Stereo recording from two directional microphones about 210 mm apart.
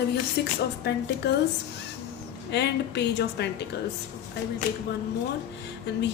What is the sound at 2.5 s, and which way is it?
Speech, 55° left (ahead or behind).